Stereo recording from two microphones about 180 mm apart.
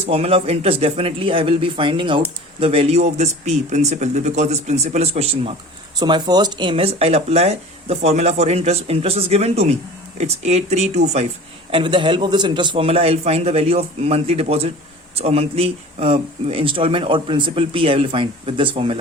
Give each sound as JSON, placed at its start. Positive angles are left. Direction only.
{"t": 0.1, "sound": "speech", "side_deg": -35}
{"t": 6.0, "sound": "speech", "side_deg": -25}
{"t": 11.7, "sound": "speech", "side_deg": -25}